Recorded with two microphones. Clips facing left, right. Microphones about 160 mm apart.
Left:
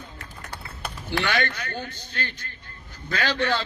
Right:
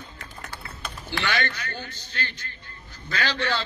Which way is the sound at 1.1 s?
50° left (ahead or behind).